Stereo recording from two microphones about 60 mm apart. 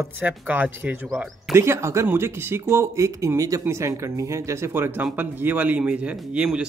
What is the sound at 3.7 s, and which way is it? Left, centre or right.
Speech, right.